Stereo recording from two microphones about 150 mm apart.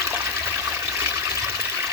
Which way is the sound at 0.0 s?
15° right (ahead or behind).